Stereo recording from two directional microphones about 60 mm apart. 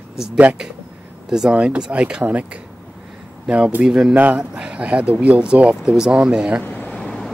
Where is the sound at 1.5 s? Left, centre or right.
Centre.